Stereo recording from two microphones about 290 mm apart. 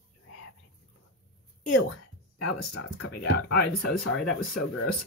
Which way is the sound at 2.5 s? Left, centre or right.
Left.